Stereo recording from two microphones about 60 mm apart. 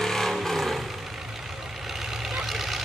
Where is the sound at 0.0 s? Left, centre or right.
Centre.